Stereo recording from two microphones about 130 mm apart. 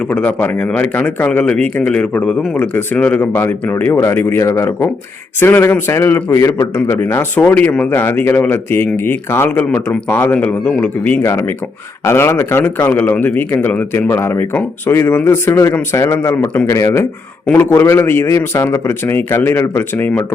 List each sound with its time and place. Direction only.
0.1 s a man's voice: 10° left (ahead or behind)
17.4 s a man's voice: 10° left (ahead or behind)
17.7 s a man's voice: 20° left (ahead or behind)